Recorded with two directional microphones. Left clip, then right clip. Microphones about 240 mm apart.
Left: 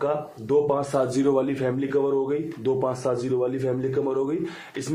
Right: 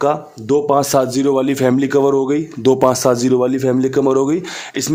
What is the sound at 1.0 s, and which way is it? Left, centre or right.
Speech, right.